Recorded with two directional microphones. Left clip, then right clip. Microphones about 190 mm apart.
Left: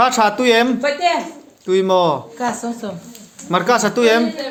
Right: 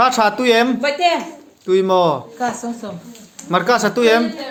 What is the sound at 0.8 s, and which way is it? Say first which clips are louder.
Speech: right 1 dB; 55° right (ahead or behind).